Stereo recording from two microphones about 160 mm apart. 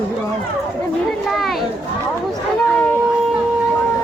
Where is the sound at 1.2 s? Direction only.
Centre (ahead or behind).